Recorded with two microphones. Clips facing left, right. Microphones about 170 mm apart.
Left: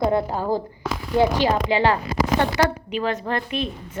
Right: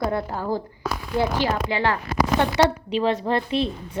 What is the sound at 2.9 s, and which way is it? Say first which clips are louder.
Speech: right 3 dB; 30° right (ahead or behind).